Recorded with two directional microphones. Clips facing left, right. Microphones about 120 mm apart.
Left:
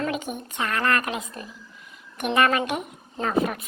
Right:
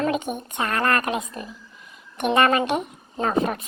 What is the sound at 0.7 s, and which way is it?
A woman's voice, 35° right (ahead or behind).